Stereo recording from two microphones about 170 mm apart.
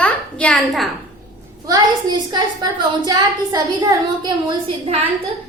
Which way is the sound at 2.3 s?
25° right (ahead or behind).